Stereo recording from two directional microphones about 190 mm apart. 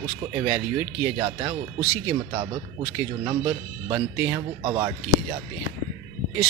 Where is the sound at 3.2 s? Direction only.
20° right (ahead or behind).